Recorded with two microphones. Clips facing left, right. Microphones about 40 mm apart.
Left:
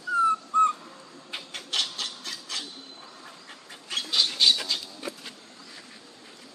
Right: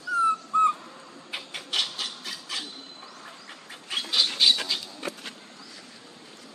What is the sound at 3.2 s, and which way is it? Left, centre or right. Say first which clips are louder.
Dog: right 2 dB; centre.